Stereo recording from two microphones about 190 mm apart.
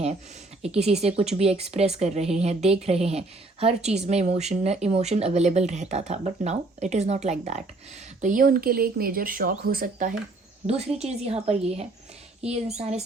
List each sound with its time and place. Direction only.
0.6 s a woman's voice: 35° right (ahead or behind)
10.7 s a woman's voice: 35° right (ahead or behind)